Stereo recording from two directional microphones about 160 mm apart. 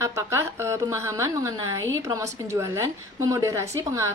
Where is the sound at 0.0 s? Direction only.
15° right (ahead or behind).